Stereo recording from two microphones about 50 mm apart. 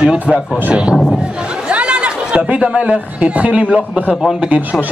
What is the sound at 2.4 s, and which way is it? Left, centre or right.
A man's voice, right.